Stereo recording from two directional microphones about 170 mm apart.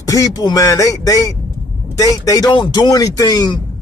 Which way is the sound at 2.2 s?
20° left (ahead or behind).